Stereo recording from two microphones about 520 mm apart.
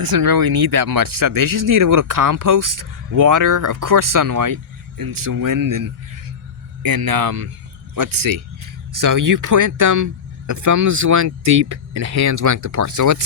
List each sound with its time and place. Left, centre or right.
0.0 s speech: right